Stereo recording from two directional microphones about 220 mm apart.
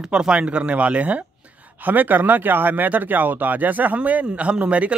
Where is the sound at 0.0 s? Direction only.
5° right (ahead or behind).